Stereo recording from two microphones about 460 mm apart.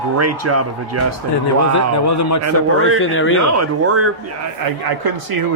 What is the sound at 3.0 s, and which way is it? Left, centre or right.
Speech, left.